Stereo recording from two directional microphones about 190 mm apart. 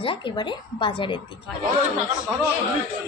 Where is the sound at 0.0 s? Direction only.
25° left (ahead or behind).